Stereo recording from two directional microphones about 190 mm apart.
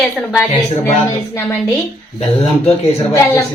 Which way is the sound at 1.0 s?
15° left (ahead or behind).